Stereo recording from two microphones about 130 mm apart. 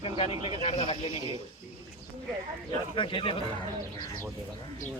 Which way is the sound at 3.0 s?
40° left (ahead or behind).